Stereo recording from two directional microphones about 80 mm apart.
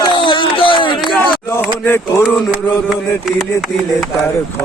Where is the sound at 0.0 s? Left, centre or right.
Left.